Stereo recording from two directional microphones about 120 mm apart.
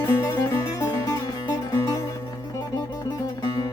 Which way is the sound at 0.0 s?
20° left (ahead or behind).